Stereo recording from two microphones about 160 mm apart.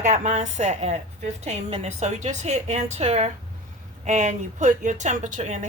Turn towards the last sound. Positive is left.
turn(degrees=-45)  # may be behind; listen again after turning